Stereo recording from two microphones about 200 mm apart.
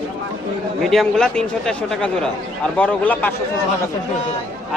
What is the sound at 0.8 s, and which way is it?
A man's voice, centre (ahead or behind).